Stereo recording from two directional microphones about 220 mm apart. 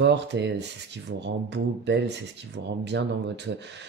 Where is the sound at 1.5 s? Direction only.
50° right (ahead or behind).